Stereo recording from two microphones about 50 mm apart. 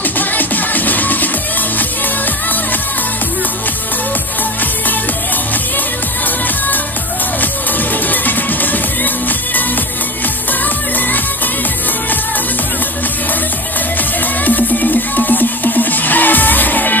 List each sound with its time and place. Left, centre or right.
0.0 s music: left
7.9 s music: left
14.4 s music: left